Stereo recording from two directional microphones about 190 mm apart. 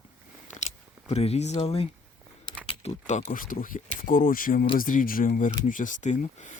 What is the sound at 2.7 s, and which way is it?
Speech, 35° left (ahead or behind).